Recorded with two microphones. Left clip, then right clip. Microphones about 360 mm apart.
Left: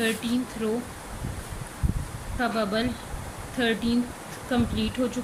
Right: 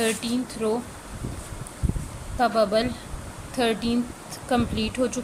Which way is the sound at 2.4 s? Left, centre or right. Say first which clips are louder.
Right 5 dB; centre.